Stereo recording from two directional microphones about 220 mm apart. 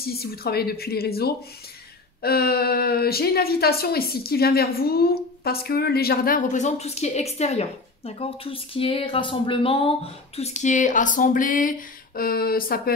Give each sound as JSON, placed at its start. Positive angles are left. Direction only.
{"t": 0.0, "sound": "a woman's voice", "side_deg": 45}